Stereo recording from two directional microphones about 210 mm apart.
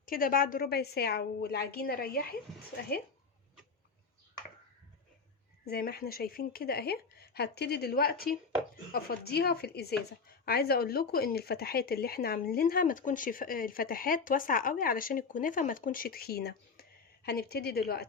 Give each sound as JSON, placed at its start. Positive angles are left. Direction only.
{"t": 0.0, "sound": "speech", "side_deg": 45}
{"t": 5.6, "sound": "speech", "side_deg": 50}